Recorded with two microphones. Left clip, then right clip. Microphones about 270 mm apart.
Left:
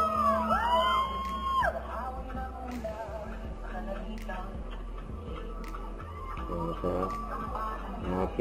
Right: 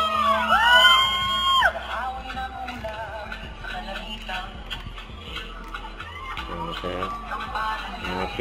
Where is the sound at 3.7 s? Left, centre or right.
Centre.